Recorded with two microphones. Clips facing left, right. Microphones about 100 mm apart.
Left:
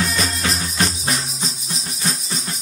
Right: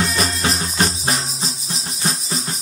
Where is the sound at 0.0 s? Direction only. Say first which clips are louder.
Right 2 dB; 30° right (ahead or behind).